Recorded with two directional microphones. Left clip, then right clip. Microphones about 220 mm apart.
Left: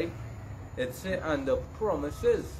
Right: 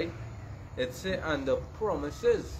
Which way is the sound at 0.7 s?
15° right (ahead or behind).